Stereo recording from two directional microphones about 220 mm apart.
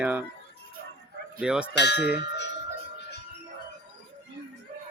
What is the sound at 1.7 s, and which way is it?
Speech, 50° left (ahead or behind).